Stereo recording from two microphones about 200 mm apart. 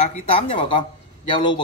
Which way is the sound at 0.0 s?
30° left (ahead or behind).